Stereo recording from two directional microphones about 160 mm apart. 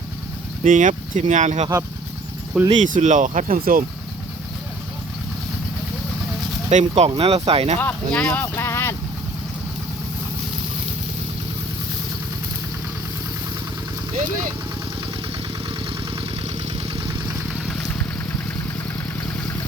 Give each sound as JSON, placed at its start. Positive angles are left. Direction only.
{"t": 0.6, "sound": "speech", "side_deg": -55}
{"t": 6.7, "sound": "speech", "side_deg": -45}
{"t": 7.8, "sound": "speech", "side_deg": 10}
{"t": 16.6, "sound": "vehicle", "side_deg": -35}